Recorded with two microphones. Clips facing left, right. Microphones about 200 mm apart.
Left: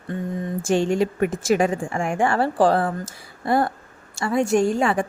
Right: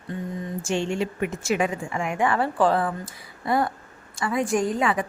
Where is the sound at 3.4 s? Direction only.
30° left (ahead or behind).